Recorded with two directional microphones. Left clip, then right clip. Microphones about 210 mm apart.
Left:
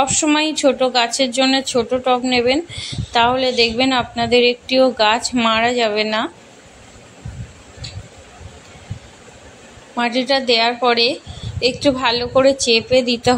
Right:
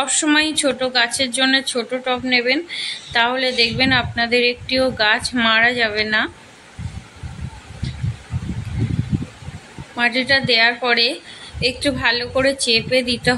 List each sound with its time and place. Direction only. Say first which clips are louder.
0.0 s speech: left 1 dB; 15° left (ahead or behind)
9.9 s speech: right 1 dB; 20° left (ahead or behind)